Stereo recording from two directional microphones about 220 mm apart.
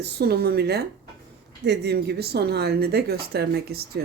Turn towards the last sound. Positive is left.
turn(degrees=-45)  # may be behind; listen again after turning